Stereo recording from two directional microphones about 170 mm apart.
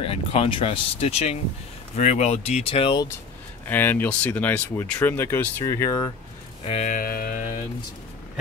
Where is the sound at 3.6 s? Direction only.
10° left (ahead or behind).